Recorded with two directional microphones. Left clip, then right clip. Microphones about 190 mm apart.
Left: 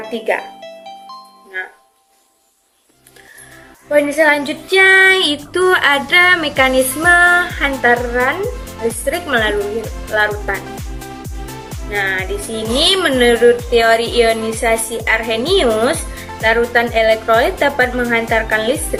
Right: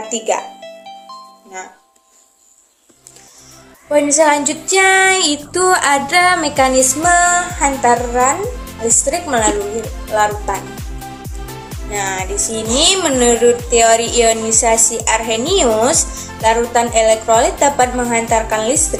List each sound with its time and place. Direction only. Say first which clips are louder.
0.1 s music: even; 5° left (ahead or behind)
3.9 s music: even; 10° left (ahead or behind)
8.4 s speech: left 1 dB; centre (ahead or behind)
9.0 s music: left 3 dB; 15° left (ahead or behind)
9.6 s speech: left 1 dB; centre (ahead or behind)
10.5 s music: even; centre (ahead or behind)
11.9 s music: left 2 dB; 15° left (ahead or behind)